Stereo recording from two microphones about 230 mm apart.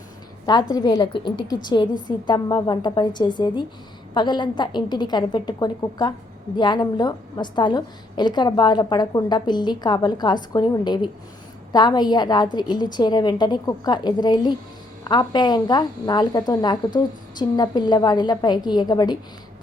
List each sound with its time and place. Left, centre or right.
0.4 s a woman's voice: centre